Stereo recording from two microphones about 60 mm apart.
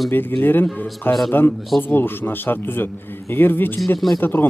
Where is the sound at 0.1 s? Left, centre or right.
Left.